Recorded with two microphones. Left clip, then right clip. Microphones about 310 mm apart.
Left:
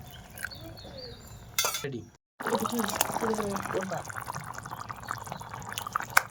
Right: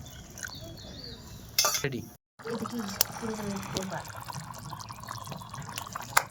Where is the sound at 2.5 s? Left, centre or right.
Left.